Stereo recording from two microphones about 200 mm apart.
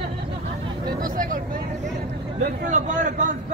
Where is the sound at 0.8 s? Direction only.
45° right (ahead or behind).